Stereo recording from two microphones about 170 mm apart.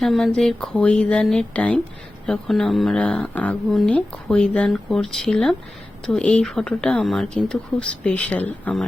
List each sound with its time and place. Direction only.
0.0 s speech: centre (ahead or behind)